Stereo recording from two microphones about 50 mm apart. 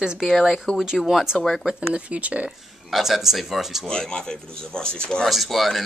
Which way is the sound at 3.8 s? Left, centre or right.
Centre.